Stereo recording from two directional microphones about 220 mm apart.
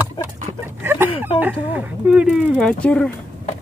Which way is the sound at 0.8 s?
10° right (ahead or behind).